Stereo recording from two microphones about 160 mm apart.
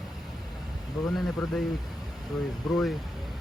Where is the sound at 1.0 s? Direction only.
25° left (ahead or behind).